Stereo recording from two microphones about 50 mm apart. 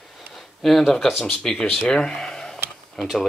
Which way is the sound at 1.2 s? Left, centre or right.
Centre.